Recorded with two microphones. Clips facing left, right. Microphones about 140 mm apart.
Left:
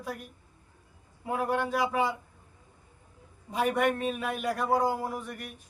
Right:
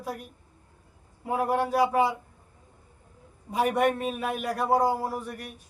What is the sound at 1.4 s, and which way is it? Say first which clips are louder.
Speech: right 3 dB; 35° right (ahead or behind).